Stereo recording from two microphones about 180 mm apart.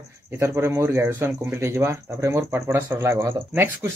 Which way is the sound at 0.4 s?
15° right (ahead or behind).